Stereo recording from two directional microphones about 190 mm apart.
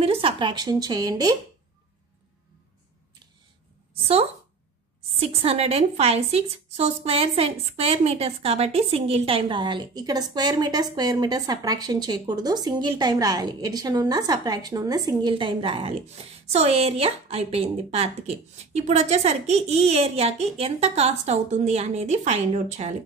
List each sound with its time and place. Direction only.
0.0 s a woman's voice: 30° right (ahead or behind)
5.3 s a woman's voice: 30° right (ahead or behind)